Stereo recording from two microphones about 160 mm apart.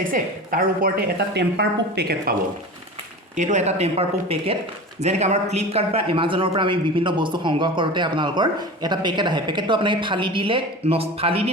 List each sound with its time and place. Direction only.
0.1 s a woman's voice: 60° right (ahead or behind); by 2.3 s 80° right
3.3 s a man's voice: 50° right (ahead or behind)